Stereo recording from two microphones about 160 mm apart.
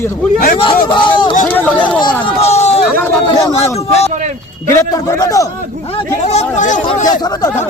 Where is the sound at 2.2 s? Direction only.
40° left (ahead or behind).